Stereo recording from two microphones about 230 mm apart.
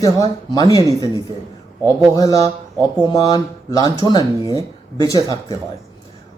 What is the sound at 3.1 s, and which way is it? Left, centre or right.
Speech, centre.